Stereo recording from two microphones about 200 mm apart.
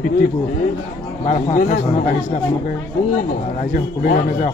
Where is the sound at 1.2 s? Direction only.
40° left (ahead or behind).